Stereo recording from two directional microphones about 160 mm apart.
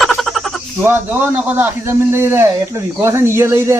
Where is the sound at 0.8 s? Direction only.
15° right (ahead or behind).